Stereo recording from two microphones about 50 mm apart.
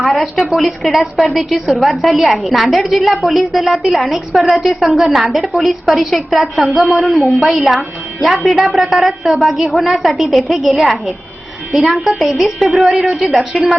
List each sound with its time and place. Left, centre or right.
0.0 s a woman's voice: centre